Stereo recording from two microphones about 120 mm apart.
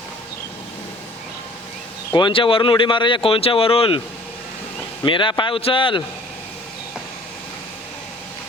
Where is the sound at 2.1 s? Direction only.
40° left (ahead or behind).